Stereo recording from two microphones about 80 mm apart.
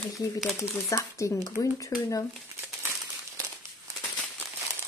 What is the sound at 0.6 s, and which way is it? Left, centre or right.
A woman's voice, left.